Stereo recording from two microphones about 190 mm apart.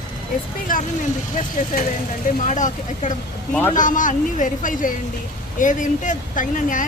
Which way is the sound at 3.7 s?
45° left (ahead or behind).